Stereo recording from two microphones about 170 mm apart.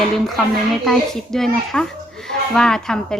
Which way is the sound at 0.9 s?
Centre (ahead or behind).